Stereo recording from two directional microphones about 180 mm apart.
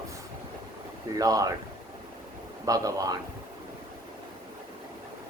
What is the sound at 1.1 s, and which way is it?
Speech, 20° right (ahead or behind).